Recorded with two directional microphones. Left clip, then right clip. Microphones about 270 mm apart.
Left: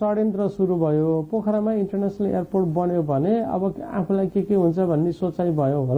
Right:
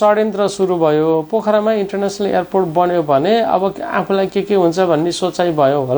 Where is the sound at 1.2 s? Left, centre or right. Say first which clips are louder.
Right 8 dB; right.